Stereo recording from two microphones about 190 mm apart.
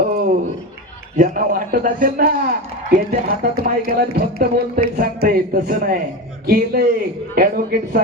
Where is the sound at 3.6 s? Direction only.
55° right (ahead or behind).